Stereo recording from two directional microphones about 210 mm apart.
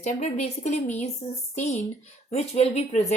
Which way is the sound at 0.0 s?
35° left (ahead or behind).